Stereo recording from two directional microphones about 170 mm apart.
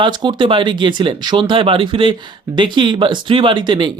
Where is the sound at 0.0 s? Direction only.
25° right (ahead or behind).